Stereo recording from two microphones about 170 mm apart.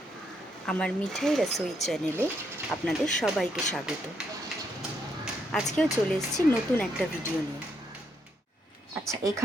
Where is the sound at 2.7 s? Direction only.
Centre (ahead or behind).